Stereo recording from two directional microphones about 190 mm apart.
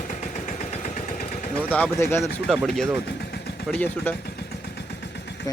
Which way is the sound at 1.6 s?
10° left (ahead or behind).